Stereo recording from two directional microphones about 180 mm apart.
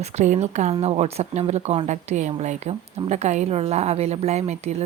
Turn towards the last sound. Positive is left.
turn(degrees=-40)  # may be behind; listen again after turning